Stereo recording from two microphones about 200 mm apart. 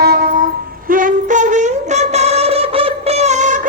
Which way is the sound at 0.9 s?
40° right (ahead or behind).